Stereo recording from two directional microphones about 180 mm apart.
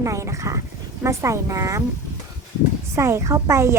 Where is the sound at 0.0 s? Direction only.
15° right (ahead or behind).